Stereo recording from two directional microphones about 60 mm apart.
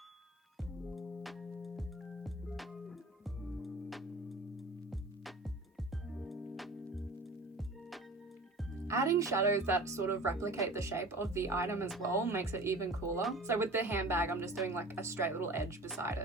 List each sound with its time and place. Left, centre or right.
0.9 s music: centre
8.9 s speech: right